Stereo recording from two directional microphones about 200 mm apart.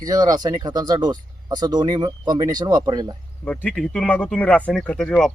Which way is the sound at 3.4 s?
5° left (ahead or behind).